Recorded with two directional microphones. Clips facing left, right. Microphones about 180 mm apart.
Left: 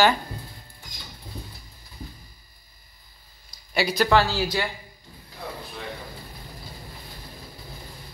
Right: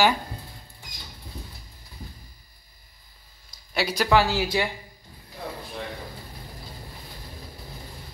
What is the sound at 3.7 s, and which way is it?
Speech, 5° right (ahead or behind).